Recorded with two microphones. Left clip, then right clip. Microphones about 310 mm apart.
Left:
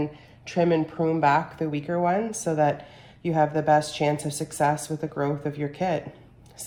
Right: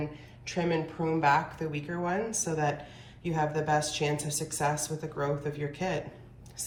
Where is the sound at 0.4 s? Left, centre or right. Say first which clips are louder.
Left 8 dB; left.